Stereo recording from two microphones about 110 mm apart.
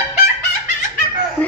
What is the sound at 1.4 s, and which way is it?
Chicken, 15° left (ahead or behind).